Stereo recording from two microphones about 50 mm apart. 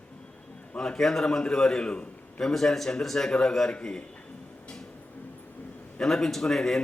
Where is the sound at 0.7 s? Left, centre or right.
Centre.